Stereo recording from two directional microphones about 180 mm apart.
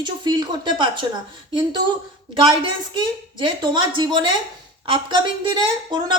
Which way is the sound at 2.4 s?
25° right (ahead or behind).